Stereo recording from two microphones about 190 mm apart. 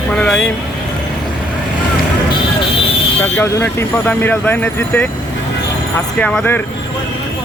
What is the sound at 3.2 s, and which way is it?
Speech, 10° left (ahead or behind).